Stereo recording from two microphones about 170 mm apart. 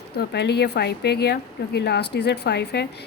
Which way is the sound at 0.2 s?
75° left (ahead or behind).